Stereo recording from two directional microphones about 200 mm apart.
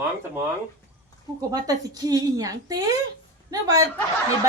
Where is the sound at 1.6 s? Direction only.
20° right (ahead or behind).